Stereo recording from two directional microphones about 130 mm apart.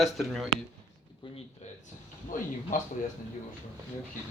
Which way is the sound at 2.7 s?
85° left.